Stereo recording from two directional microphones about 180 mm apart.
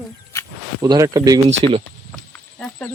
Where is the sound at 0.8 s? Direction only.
20° right (ahead or behind).